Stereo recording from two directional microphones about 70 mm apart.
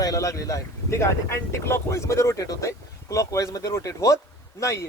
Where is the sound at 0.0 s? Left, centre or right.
Left.